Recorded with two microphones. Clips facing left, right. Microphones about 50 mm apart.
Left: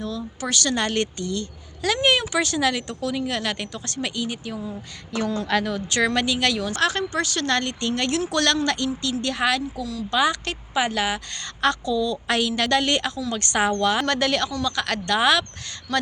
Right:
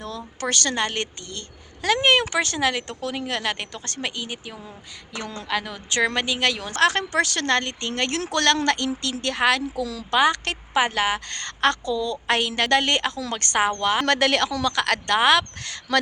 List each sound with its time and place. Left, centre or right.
0.4 s a woman's voice: right
0.8 s speech: right
1.3 s speech: right; by 5.6 s centre
5.6 s speech: right
7.1 s a woman's voice: right
7.4 s a woman's voice: right
10.8 s a woman's voice: right
13.6 s speech: right
14.0 s a woman's voice: right